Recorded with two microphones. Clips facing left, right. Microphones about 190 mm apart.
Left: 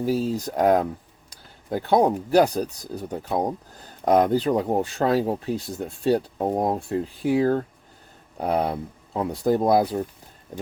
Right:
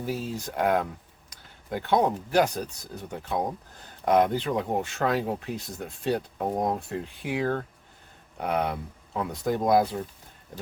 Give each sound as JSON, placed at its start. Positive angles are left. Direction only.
{"t": 0.0, "sound": "speech", "side_deg": 40}